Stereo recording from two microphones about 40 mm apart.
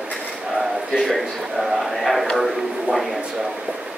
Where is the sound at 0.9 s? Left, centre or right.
Centre.